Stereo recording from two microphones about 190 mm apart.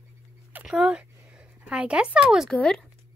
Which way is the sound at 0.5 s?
5° right (ahead or behind).